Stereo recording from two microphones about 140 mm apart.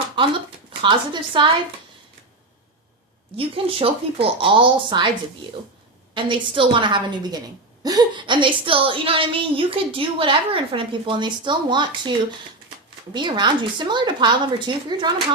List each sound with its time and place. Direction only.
0.7 s a woman's voice: 35° right (ahead or behind)
3.3 s a woman's voice: 40° right (ahead or behind)
6.1 s a woman's voice: 35° right (ahead or behind)
13.1 s a woman's voice: 35° right (ahead or behind)